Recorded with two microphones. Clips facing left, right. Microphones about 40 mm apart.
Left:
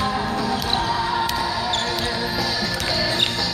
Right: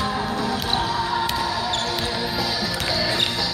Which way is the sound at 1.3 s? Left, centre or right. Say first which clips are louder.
Left 1 dB; centre.